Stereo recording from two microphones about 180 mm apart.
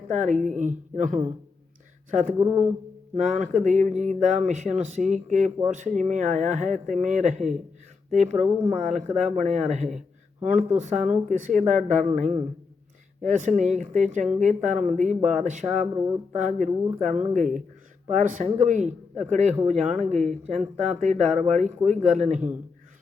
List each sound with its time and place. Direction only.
0.1 s speech: 45° right (ahead or behind)
3.3 s speech: 40° right (ahead or behind)
9.0 s speech: centre (ahead or behind)
9.3 s speech: 40° right (ahead or behind)